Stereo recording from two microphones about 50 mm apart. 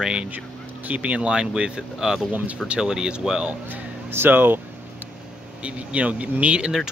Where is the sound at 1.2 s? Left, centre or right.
Centre.